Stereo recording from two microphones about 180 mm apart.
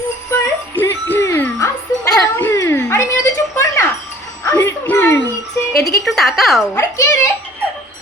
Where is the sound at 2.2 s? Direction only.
15° left (ahead or behind).